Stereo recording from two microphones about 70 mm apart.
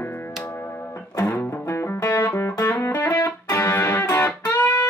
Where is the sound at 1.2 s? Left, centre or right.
Left.